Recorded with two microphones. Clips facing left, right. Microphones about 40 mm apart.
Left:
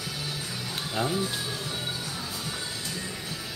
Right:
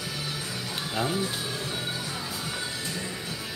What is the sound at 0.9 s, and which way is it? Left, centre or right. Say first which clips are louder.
Speech: even; centre.